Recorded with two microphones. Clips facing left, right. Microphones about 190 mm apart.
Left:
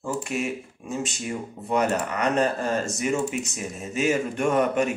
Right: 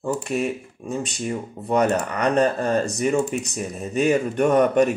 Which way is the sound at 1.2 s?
35° right (ahead or behind).